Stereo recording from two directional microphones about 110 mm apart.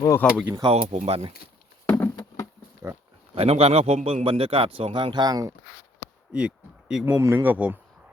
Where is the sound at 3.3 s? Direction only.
65° right (ahead or behind); by 5.5 s 35° right (ahead or behind).